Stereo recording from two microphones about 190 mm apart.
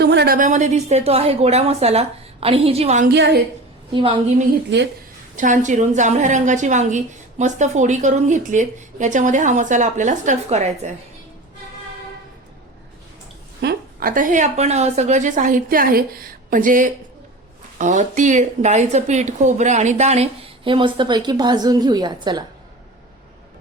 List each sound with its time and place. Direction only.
0.0 s a sound: 60° right (ahead or behind)
0.3 s a woman's voice: 40° right (ahead or behind)
3.1 s a woman's voice: 60° right (ahead or behind)
3.9 s a woman's voice: 25° right (ahead or behind)
4.7 s a woman's voice: 65° right (ahead or behind)
5.4 s a woman's voice: 40° right (ahead or behind)
13.6 s a woman's voice: 55° right (ahead or behind); by 22.4 s 20° right (ahead or behind)